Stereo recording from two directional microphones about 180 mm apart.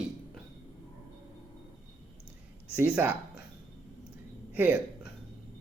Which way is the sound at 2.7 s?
10° right (ahead or behind).